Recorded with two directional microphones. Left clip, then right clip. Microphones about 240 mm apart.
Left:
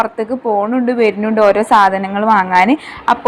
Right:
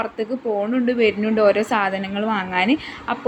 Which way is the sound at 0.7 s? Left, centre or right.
Centre.